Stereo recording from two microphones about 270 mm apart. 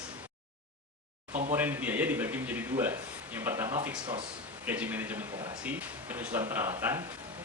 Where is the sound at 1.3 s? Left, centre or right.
Right.